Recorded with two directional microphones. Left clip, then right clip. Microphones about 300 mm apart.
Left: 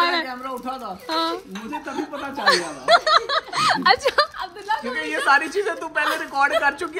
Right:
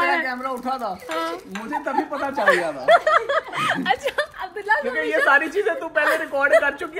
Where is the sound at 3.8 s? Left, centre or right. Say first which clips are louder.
Left 5 dB; left.